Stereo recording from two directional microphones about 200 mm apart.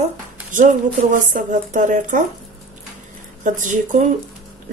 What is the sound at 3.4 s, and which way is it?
Speech, 40° right (ahead or behind).